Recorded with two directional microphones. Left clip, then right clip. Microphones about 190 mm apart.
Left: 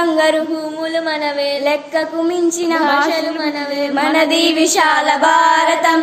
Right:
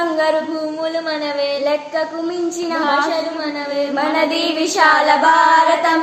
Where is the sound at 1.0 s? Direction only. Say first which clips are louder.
Left 2 dB; 20° left (ahead or behind).